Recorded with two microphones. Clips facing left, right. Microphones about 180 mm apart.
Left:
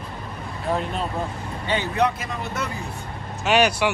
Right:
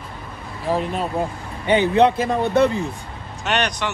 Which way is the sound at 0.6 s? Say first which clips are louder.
Right 3 dB; centre (ahead or behind).